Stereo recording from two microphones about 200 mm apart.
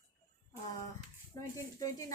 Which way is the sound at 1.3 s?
15° left (ahead or behind).